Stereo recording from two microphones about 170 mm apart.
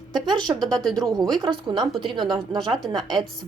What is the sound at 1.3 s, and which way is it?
Speech, 25° right (ahead or behind).